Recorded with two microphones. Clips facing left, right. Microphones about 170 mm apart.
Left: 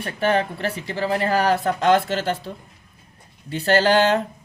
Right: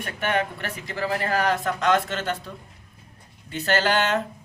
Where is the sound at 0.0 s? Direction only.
30° left (ahead or behind).